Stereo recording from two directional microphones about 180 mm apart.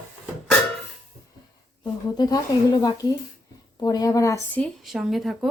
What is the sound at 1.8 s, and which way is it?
Speech, 20° left (ahead or behind).